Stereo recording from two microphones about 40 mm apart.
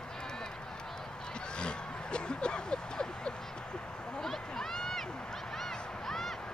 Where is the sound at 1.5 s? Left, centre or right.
Left.